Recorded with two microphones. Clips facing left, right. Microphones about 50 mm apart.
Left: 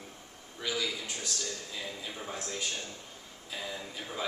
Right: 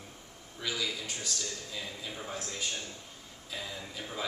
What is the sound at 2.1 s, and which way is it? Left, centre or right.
Speech, centre.